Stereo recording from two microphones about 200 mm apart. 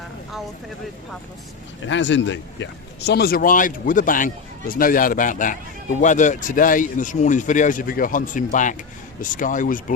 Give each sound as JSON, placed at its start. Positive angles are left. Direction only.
{"t": 1.9, "sound": "a man's voice", "side_deg": 70}